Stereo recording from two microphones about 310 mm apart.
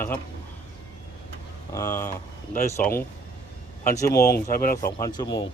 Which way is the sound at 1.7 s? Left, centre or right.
Centre.